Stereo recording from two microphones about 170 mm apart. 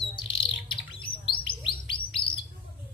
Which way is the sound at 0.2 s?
30° left (ahead or behind).